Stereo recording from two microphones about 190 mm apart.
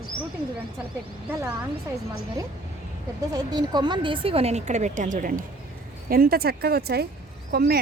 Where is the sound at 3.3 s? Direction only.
20° right (ahead or behind).